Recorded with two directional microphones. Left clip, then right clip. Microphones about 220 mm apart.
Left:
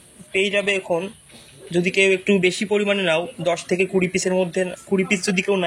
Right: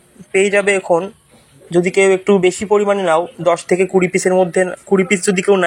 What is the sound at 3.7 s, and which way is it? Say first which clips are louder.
Speech: right 6 dB; 20° right (ahead or behind).